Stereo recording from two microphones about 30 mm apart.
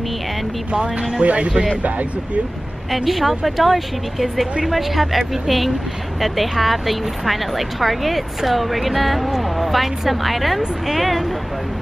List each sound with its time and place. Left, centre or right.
0.7 s speech: right
1.8 s speech: right
3.1 s speech: centre